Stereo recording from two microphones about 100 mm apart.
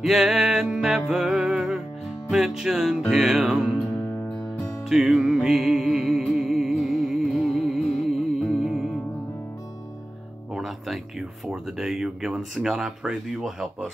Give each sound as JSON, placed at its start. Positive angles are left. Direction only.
{"t": 0.0, "sound": "music", "side_deg": 0}
{"t": 3.1, "sound": "speech", "side_deg": 0}
{"t": 4.8, "sound": "music", "side_deg": -10}
{"t": 10.5, "sound": "speech", "side_deg": 0}